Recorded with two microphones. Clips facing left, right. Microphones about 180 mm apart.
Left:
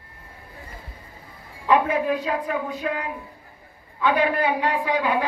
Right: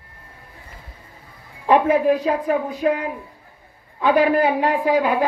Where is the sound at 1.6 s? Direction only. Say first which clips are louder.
Right 5 dB; 40° right (ahead or behind).